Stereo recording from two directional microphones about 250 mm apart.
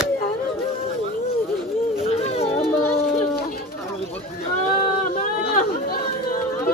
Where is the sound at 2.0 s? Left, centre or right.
Left.